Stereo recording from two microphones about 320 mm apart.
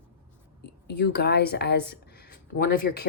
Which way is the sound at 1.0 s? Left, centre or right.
Left.